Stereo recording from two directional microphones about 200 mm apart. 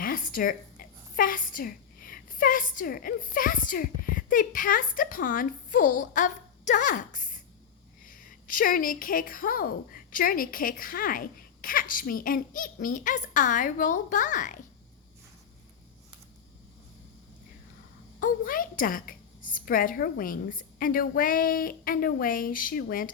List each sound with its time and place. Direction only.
0.0 s a woman's voice: 45° left (ahead or behind)
18.2 s a woman's voice: 40° left (ahead or behind)